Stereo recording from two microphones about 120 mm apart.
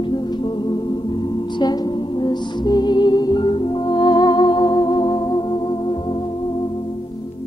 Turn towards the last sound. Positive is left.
turn(degrees=40)  # may be behind; listen again after turning